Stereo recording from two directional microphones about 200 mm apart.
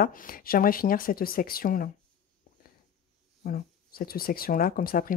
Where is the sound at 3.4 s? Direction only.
45° left (ahead or behind).